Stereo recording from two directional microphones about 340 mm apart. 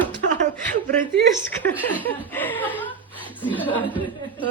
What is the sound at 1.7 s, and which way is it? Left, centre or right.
Speech, centre.